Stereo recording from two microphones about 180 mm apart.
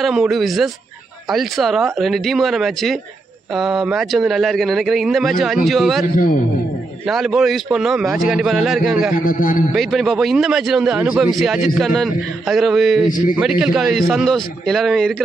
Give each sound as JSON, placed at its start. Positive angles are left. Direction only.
{"t": 0.0, "sound": "a man's voice", "side_deg": 0}
{"t": 7.1, "sound": "a man's voice", "side_deg": 0}
{"t": 9.1, "sound": "a man's voice", "side_deg": 50}
{"t": 9.8, "sound": "a man's voice", "side_deg": 0}